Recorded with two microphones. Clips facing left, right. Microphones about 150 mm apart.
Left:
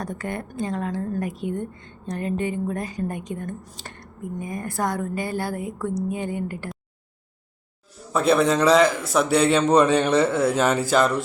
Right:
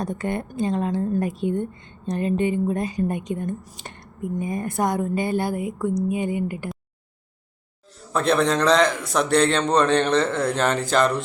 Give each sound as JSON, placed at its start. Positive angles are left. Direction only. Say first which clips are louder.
{"t": 0.0, "sound": "a woman's voice", "louder": "right 4 dB", "side_deg": -25}
{"t": 3.6, "sound": "speech", "louder": "left 1 dB", "side_deg": -10}
{"t": 3.8, "sound": "a woman's voice", "louder": "right 4 dB", "side_deg": -20}
{"t": 8.1, "sound": "a man's voice", "louder": "left 1 dB", "side_deg": 5}